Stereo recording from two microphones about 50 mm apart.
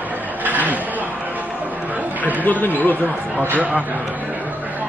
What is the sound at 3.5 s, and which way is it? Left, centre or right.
Speech, right.